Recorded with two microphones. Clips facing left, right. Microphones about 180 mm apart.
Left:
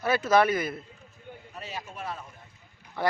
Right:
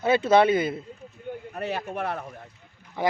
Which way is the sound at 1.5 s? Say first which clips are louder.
Right 9 dB; 60° right (ahead or behind).